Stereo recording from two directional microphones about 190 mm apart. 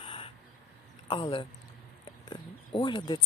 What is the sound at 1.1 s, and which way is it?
Speech, 25° left (ahead or behind).